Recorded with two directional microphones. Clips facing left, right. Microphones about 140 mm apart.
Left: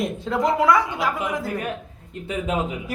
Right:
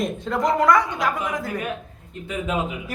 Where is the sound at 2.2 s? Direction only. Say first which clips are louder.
Left 1 dB; 30° left (ahead or behind).